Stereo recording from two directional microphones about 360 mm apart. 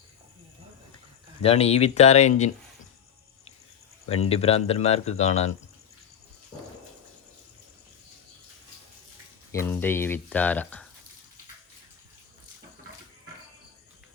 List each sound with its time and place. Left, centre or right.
1.4 s speech: centre
4.1 s speech: centre
9.5 s speech: centre